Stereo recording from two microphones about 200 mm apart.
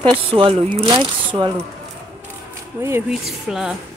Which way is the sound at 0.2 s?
25° right (ahead or behind).